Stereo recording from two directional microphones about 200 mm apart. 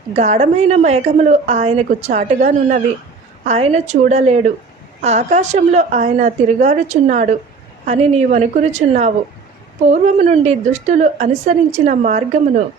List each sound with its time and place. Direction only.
0.2 s a woman's voice: 35° right (ahead or behind)